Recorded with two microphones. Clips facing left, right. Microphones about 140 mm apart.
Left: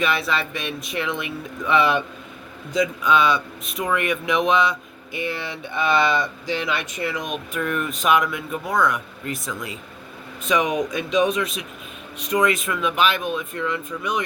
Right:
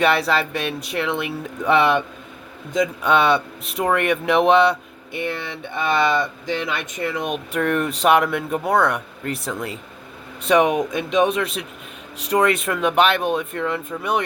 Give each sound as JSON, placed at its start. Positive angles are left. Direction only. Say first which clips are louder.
{"t": 0.0, "sound": "speech", "louder": "right 4 dB", "side_deg": -70}